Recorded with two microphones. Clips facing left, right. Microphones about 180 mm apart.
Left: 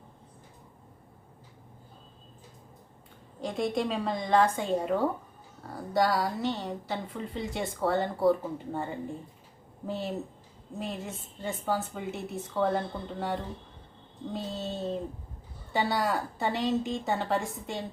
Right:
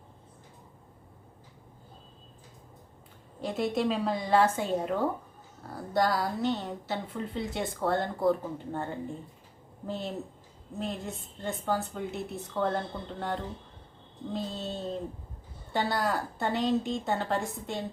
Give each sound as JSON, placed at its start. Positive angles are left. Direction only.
{"t": 3.4, "sound": "a woman's voice", "side_deg": -5}